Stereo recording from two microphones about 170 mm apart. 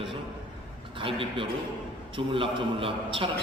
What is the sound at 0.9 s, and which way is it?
A man's voice, 30° right (ahead or behind).